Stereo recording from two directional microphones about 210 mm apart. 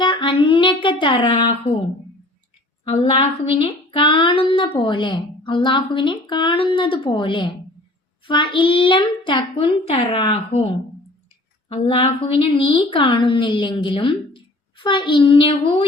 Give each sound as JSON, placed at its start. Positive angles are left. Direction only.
{"t": 0.0, "sound": "child singing", "side_deg": 25}
{"t": 2.8, "sound": "speech", "side_deg": 30}
{"t": 11.7, "sound": "speech", "side_deg": 25}